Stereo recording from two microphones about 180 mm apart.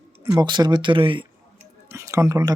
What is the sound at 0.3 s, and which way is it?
Speech, 25° right (ahead or behind).